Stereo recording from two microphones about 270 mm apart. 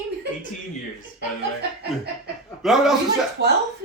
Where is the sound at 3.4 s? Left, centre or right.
Right.